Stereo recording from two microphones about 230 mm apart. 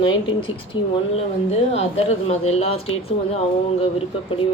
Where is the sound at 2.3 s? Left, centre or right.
Left.